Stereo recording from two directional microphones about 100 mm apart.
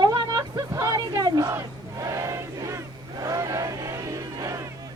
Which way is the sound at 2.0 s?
30° right (ahead or behind).